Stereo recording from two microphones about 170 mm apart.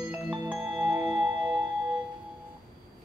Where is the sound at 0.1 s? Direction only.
5° right (ahead or behind).